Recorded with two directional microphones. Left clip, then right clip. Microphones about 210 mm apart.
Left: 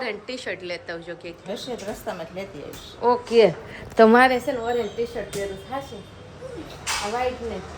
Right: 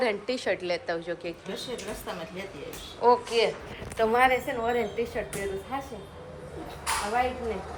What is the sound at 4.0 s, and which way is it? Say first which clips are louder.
Speech: left 9 dB; 40° left (ahead or behind).